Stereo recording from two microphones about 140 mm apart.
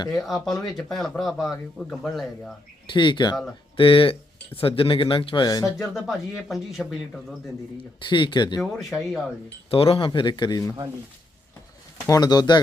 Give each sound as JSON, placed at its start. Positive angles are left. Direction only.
{"t": 0.3, "sound": "a man's voice", "side_deg": 0}
{"t": 2.9, "sound": "speech", "side_deg": 35}
{"t": 5.9, "sound": "a man's voice", "side_deg": 0}
{"t": 8.1, "sound": "speech", "side_deg": 35}
{"t": 8.8, "sound": "a man's voice", "side_deg": 0}
{"t": 9.6, "sound": "speech", "side_deg": 40}
{"t": 11.9, "sound": "speech", "side_deg": 25}